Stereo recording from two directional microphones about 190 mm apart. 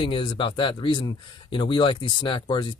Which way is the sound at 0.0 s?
25° left (ahead or behind).